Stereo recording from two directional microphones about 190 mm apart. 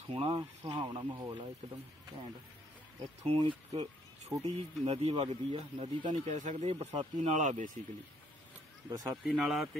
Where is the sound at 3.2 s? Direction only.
30° right (ahead or behind).